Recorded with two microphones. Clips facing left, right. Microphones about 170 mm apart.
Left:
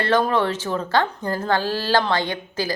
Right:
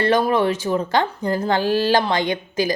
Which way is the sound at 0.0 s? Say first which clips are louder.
Right 2 dB; 15° right (ahead or behind).